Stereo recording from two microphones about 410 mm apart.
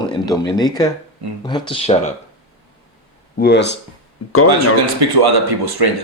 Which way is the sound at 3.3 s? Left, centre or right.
Left.